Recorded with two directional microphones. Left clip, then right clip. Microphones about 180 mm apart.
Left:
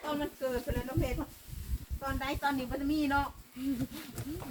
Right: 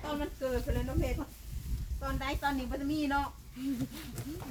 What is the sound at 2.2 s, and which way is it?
Speech, 10° left (ahead or behind).